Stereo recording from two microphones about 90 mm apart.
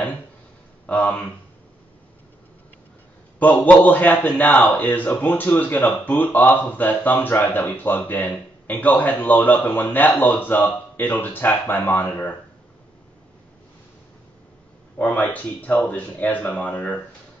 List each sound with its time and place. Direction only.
0.8 s a sound: 15° left (ahead or behind)
3.3 s a man's voice: 20° left (ahead or behind)
15.0 s speech: 20° left (ahead or behind)